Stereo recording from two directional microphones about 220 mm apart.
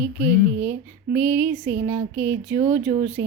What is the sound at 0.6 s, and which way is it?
Speech, 10° right (ahead or behind).